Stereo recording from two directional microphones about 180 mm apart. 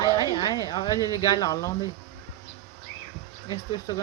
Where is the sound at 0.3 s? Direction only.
25° left (ahead or behind).